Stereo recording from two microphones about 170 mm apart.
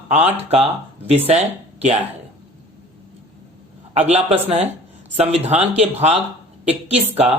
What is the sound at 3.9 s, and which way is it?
Speech, 40° right (ahead or behind).